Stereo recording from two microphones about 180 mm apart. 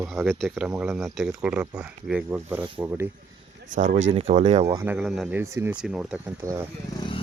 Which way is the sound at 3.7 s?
40° right (ahead or behind).